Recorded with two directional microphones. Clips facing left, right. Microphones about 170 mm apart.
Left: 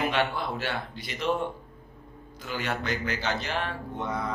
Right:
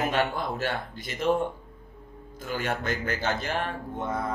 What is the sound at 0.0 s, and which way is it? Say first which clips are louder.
Speech: right 1 dB; 45° right (ahead or behind).